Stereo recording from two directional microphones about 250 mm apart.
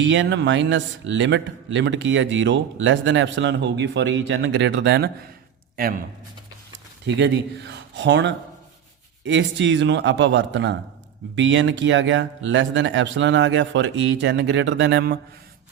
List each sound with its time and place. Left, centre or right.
0.0 s speech: right
7.0 s speech: right